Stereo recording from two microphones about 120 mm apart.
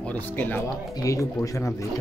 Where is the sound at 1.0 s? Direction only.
25° left (ahead or behind).